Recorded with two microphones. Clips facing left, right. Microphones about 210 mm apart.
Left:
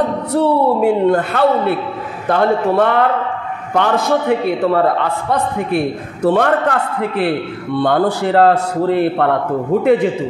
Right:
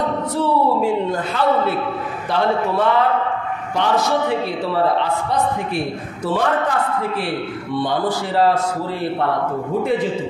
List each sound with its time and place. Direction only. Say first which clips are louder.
0.3 s a man's voice: left 5 dB; 65° left (ahead or behind)